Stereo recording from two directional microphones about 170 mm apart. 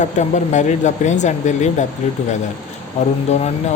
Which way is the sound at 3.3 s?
40° left (ahead or behind).